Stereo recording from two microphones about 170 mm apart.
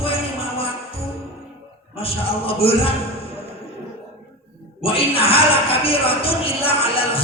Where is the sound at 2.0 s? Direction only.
35° left (ahead or behind).